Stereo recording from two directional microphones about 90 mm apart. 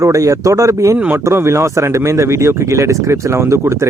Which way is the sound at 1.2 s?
30° right (ahead or behind).